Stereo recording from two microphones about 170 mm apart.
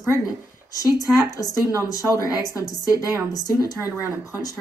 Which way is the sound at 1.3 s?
20° left (ahead or behind).